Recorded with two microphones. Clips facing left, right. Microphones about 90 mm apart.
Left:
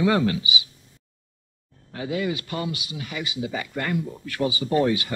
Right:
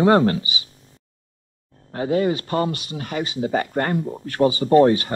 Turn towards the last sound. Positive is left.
turn(degrees=-40)  # may be behind; listen again after turning